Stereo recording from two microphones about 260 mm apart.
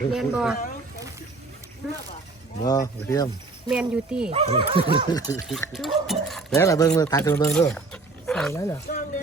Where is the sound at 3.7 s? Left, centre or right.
Centre.